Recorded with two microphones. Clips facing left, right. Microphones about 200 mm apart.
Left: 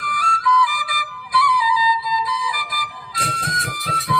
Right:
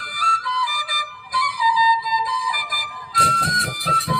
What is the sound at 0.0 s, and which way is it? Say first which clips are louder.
Flute: left 5 dB; 35° right (ahead or behind).